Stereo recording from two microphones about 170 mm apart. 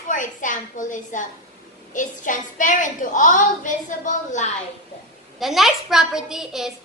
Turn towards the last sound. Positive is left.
turn(degrees=-5)  # may be behind; listen again after turning